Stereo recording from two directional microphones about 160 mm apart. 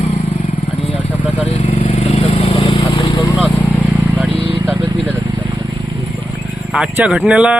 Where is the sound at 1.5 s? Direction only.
35° left (ahead or behind).